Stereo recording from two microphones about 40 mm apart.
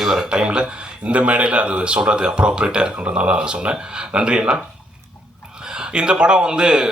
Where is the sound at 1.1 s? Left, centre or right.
Right.